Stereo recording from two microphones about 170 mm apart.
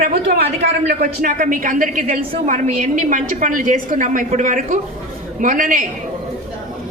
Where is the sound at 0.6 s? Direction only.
65° right (ahead or behind).